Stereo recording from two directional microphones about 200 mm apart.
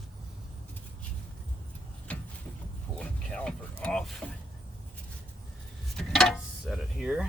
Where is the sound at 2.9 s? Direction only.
5° left (ahead or behind).